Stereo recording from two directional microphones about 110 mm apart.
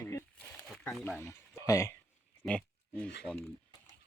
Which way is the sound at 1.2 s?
25° left (ahead or behind).